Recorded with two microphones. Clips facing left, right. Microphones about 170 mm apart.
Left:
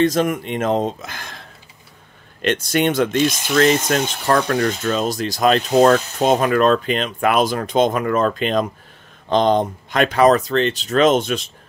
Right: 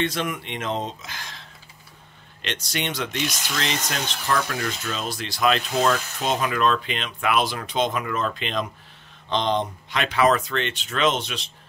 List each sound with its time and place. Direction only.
0.0 s speech: 40° left (ahead or behind)
2.4 s speech: 50° left (ahead or behind)